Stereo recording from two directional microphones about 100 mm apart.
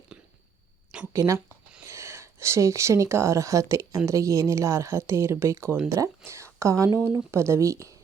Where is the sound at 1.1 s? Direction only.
30° right (ahead or behind).